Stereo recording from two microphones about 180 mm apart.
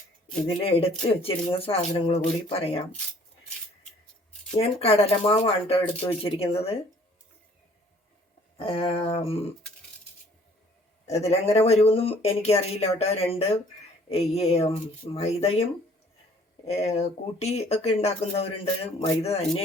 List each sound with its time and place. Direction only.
0.4 s speech: 35° left (ahead or behind)
4.6 s speech: 35° left (ahead or behind)
8.5 s speech: 30° left (ahead or behind)
11.1 s speech: 35° left (ahead or behind)
16.6 s speech: 35° left (ahead or behind)